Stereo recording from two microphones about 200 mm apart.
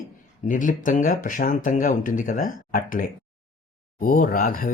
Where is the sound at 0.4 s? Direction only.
40° left (ahead or behind).